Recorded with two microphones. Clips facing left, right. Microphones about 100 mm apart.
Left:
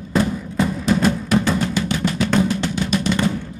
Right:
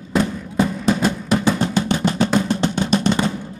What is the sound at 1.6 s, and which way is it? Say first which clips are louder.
Drum: right 2 dB; 30° right (ahead or behind).